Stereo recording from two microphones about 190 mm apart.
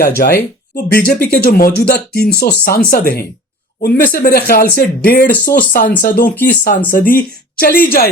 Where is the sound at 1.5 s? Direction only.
50° left (ahead or behind).